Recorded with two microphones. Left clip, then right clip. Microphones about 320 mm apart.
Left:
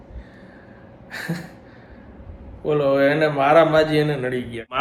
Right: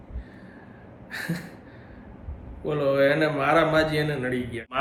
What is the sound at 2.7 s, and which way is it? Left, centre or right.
A man's voice, centre.